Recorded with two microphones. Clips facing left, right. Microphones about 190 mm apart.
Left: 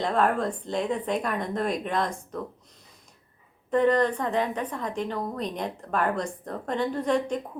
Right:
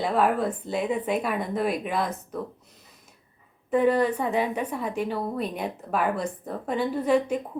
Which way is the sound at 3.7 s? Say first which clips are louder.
Even; 5° right (ahead or behind).